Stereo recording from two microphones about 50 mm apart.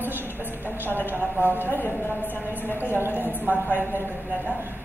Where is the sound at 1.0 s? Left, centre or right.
Right.